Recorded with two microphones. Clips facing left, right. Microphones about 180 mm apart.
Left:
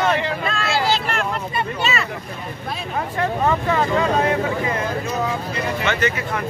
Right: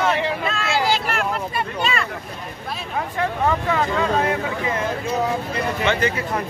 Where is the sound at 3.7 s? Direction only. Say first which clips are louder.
Left 2 dB; centre (ahead or behind).